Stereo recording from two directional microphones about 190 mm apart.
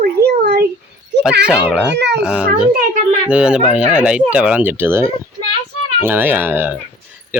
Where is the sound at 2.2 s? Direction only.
5° right (ahead or behind).